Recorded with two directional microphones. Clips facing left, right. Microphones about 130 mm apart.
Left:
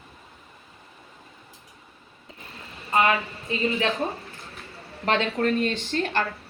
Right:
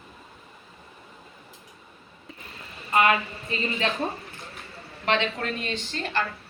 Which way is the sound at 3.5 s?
20° left (ahead or behind).